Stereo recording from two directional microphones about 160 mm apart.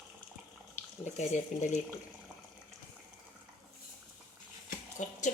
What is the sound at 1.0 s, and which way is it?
Speech, 45° left (ahead or behind).